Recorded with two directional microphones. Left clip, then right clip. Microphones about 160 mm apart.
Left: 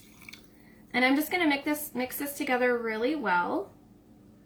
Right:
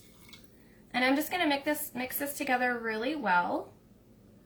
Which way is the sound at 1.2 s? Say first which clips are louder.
Left 2 dB; 25° right (ahead or behind).